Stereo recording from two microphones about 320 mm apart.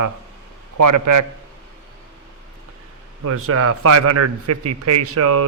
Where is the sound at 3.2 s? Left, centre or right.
Right.